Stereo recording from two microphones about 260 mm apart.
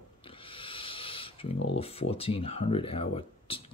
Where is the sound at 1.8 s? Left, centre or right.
Left.